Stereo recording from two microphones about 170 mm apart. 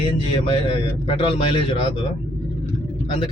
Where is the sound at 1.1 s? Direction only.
30° left (ahead or behind).